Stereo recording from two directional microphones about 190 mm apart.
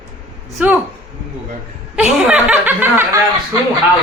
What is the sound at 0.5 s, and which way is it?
Speech, 10° right (ahead or behind).